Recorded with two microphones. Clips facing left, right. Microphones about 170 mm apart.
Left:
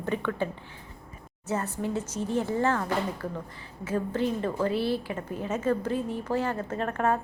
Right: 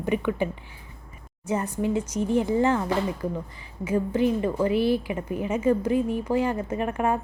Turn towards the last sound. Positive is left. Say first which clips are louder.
# right 2 dB
turn(degrees=-10)  # may be behind; listen again after turning